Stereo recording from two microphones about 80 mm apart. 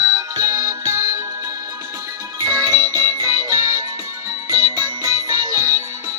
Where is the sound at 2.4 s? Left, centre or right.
Right.